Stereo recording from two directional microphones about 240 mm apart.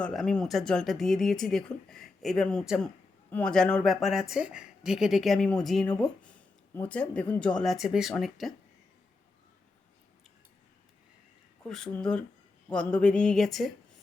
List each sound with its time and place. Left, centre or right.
0.0 s speech: centre
11.7 s speech: centre